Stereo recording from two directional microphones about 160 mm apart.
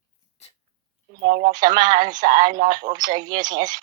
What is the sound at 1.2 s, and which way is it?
Speech, 30° right (ahead or behind).